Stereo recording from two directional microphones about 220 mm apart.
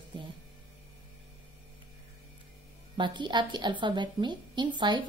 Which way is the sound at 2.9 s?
20° right (ahead or behind).